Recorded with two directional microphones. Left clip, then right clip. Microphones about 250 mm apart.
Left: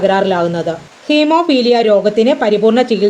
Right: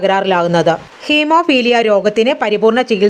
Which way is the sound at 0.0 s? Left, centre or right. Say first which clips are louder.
Even; right.